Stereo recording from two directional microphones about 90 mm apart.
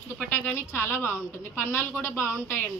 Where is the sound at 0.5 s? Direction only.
20° left (ahead or behind).